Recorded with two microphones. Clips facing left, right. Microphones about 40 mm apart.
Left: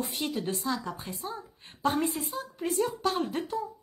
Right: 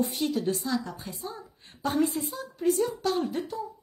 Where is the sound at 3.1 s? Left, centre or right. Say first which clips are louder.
Right 1 dB; left.